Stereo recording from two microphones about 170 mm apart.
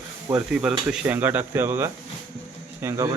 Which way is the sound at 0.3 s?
5° right (ahead or behind).